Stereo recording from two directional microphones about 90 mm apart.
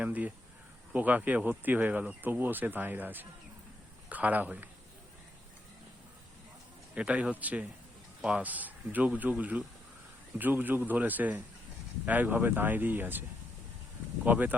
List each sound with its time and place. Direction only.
0.0 s speech: 15° right (ahead or behind)
6.9 s speech: 15° right (ahead or behind)
14.3 s speech: 20° right (ahead or behind)